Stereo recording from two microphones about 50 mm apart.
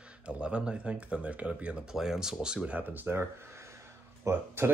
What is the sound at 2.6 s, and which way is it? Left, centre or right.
Speech, right.